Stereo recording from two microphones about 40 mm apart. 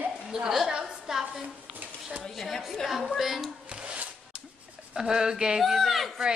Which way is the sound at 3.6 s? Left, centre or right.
Right.